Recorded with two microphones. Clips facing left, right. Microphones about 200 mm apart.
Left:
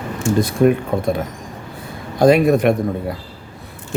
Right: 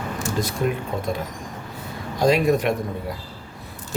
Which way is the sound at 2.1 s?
55° left (ahead or behind).